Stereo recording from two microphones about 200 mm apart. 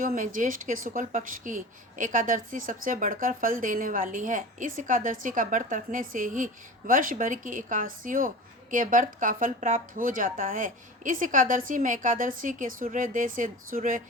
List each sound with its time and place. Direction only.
0.0 s a woman's voice: 40° right (ahead or behind)